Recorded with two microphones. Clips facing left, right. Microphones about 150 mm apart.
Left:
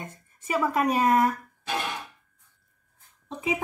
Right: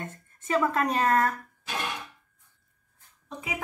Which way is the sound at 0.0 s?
10° left (ahead or behind).